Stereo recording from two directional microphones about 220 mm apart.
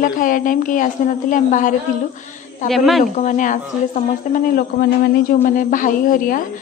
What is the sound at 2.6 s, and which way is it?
Speech, centre (ahead or behind).